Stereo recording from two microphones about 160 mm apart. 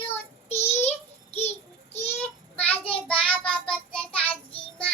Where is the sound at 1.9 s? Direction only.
40° left (ahead or behind).